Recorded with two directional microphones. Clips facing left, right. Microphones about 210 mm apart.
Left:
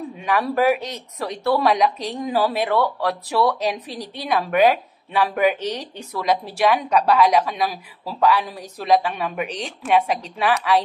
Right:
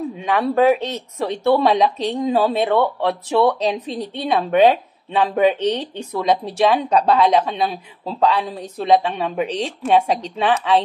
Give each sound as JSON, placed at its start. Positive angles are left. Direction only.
{"t": 0.3, "sound": "speech", "side_deg": -25}